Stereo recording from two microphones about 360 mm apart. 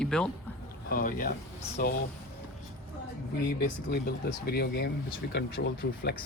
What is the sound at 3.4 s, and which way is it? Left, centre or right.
Speech, left.